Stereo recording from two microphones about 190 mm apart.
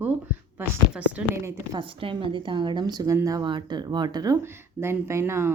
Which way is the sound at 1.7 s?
25° right (ahead or behind).